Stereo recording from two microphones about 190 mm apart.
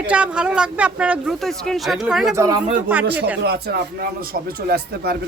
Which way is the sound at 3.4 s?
55° right (ahead or behind).